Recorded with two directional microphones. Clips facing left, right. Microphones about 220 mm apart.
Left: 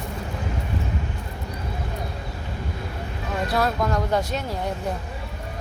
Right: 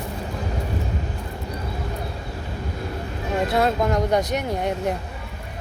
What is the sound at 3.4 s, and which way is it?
Speech, 25° right (ahead or behind).